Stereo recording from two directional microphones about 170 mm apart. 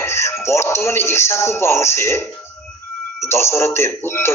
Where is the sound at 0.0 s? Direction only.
15° left (ahead or behind).